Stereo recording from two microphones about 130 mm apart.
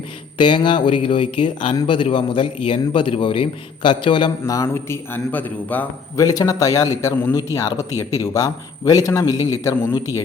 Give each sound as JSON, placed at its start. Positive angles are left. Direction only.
{"t": 0.3, "sound": "a man's voice", "side_deg": 40}
{"t": 4.4, "sound": "a man's voice", "side_deg": 25}
{"t": 6.1, "sound": "a man's voice", "side_deg": 30}